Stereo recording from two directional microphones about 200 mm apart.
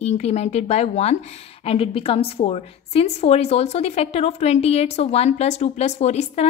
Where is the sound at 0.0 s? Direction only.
30° left (ahead or behind).